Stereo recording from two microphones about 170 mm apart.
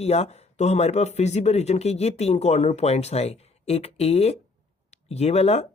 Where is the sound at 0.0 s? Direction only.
40° left (ahead or behind).